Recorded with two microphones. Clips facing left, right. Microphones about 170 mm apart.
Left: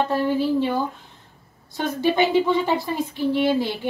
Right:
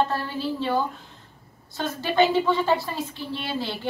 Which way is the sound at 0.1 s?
15° left (ahead or behind).